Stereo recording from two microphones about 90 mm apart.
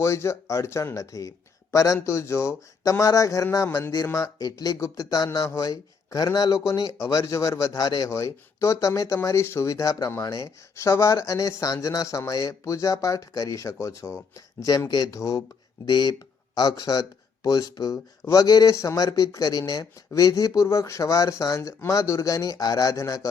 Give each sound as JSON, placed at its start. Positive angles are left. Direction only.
{"t": 0.0, "sound": "speech", "side_deg": 30}
{"t": 15.9, "sound": "speech", "side_deg": 50}